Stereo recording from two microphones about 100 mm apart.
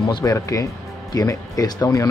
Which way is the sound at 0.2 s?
35° left (ahead or behind).